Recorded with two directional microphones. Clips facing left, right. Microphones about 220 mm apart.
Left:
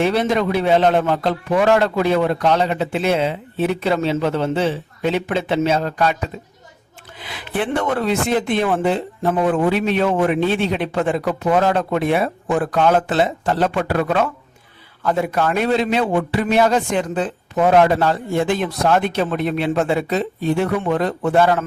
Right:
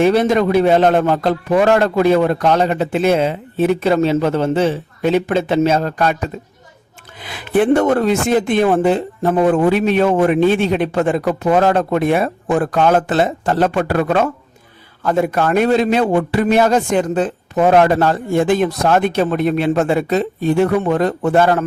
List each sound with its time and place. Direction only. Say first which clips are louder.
0.0 s speech: right 5 dB; 45° right (ahead or behind)